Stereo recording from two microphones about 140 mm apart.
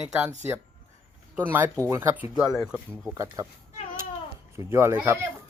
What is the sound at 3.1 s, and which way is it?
Speech, 20° right (ahead or behind).